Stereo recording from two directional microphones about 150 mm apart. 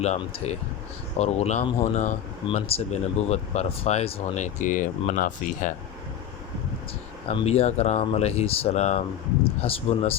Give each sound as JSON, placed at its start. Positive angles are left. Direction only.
{"t": 0.2, "sound": "speech", "side_deg": 40}
{"t": 7.3, "sound": "speech", "side_deg": 40}